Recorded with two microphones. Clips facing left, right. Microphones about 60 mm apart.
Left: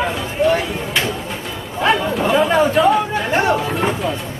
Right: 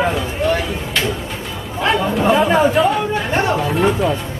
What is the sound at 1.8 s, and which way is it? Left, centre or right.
Speech, centre.